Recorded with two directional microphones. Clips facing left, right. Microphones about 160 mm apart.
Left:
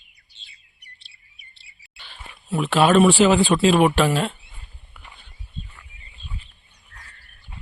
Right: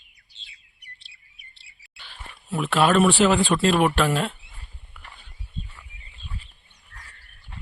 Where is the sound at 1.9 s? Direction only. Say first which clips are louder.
Even; centre (ahead or behind).